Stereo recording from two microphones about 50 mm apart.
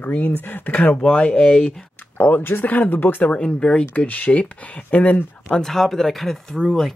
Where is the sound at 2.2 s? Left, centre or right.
Left; by 4.0 s centre.